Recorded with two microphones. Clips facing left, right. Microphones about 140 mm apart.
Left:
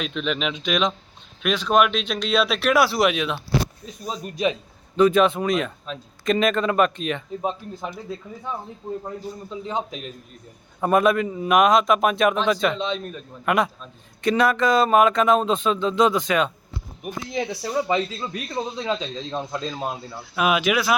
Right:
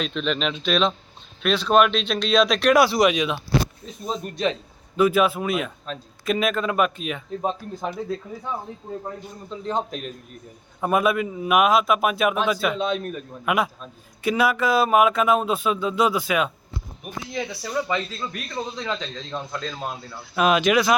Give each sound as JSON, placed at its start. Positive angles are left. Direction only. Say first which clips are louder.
{"t": 0.0, "sound": "speech", "louder": "right 1 dB", "side_deg": 5}
{"t": 4.9, "sound": "a man's voice", "louder": "left 2 dB", "side_deg": -5}
{"t": 9.6, "sound": "a man's voice", "louder": "right 3 dB", "side_deg": 0}
{"t": 17.3, "sound": "speech", "louder": "left 3 dB", "side_deg": 20}
{"t": 17.7, "sound": "a man's voice", "louder": "left 2 dB", "side_deg": 30}
{"t": 17.9, "sound": "a man's voice", "louder": "left 3 dB", "side_deg": 15}
{"t": 20.3, "sound": "a man's voice", "louder": "right 2 dB", "side_deg": 5}